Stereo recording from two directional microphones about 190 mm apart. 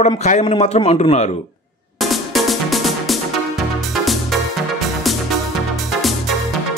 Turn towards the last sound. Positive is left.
turn(degrees=0)  # may be behind; listen again after turning